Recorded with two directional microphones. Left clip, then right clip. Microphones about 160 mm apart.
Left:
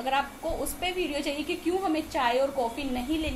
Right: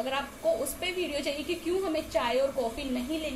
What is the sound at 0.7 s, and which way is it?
A woman's voice, 10° left (ahead or behind).